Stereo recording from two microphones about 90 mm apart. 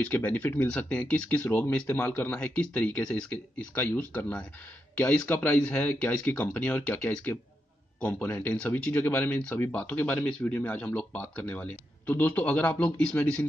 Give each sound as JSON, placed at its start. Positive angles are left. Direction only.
{"t": 0.0, "sound": "speech", "side_deg": 20}